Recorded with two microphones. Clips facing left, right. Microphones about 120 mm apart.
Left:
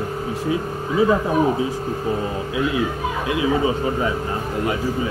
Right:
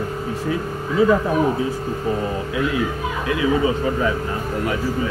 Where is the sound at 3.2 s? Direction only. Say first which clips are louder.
Right 1 dB; 20° left (ahead or behind).